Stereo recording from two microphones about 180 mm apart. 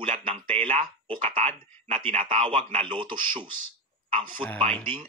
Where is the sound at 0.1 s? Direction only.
30° right (ahead or behind).